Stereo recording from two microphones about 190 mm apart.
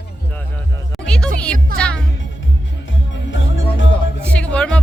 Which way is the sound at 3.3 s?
80° left.